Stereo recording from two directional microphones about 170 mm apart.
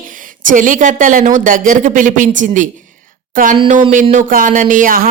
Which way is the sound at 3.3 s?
55° right (ahead or behind).